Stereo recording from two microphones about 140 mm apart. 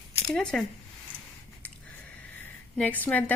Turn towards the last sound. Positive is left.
turn(degrees=10)  # may be behind; listen again after turning